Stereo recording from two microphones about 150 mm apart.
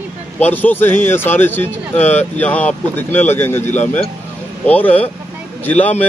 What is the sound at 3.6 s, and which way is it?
Speech, 55° left (ahead or behind).